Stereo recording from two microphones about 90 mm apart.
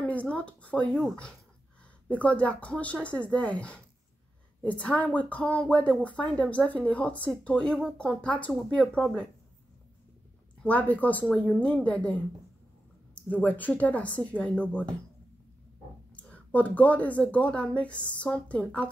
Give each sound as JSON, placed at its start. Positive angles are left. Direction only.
{"t": 0.0, "sound": "speech", "side_deg": 15}
{"t": 2.0, "sound": "speech", "side_deg": 15}
{"t": 10.6, "sound": "speech", "side_deg": 15}
{"t": 13.3, "sound": "speech", "side_deg": 15}
{"t": 16.2, "sound": "speech", "side_deg": 15}